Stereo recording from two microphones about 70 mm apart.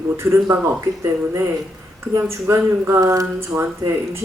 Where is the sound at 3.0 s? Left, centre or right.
Right.